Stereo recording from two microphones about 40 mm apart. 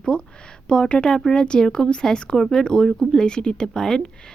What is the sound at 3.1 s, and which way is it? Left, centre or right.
Speech, centre.